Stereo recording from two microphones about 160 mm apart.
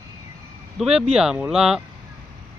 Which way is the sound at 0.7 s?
5° right (ahead or behind).